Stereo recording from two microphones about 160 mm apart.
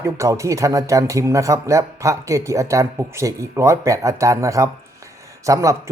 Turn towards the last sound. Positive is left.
turn(degrees=-20)  # may be behind; listen again after turning